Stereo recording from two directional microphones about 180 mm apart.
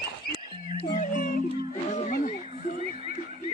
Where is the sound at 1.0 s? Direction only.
45° left (ahead or behind).